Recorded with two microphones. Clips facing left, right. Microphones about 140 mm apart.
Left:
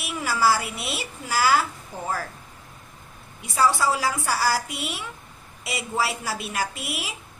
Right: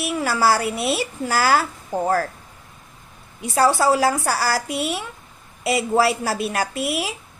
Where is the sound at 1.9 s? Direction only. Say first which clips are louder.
Right 9 dB; 60° right (ahead or behind).